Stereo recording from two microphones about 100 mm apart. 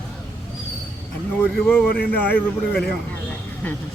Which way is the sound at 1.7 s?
10° left (ahead or behind).